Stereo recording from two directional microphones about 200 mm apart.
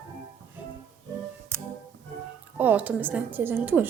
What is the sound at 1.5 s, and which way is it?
Music, 15° right (ahead or behind).